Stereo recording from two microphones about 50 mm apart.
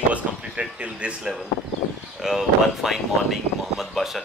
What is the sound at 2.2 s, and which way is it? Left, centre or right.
Speech, centre.